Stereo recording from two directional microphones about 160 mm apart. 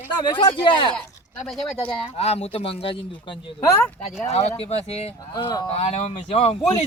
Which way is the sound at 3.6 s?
20° left (ahead or behind).